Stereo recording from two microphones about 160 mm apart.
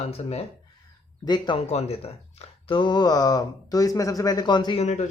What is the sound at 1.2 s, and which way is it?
Speech, 30° left (ahead or behind).